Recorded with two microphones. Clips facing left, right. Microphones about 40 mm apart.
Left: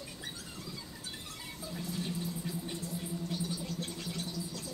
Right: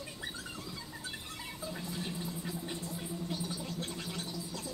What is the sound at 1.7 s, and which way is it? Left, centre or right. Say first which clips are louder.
Music: left 4 dB; centre.